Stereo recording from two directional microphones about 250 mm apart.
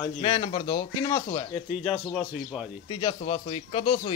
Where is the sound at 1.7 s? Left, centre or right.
Centre.